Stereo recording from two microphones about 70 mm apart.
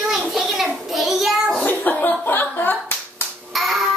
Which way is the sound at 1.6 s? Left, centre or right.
Left.